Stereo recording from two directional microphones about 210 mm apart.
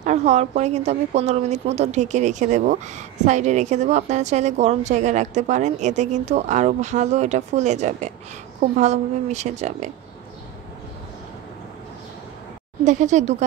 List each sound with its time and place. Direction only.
0.0 s a woman's voice: 35° right (ahead or behind)
12.8 s a woman's voice: 35° right (ahead or behind)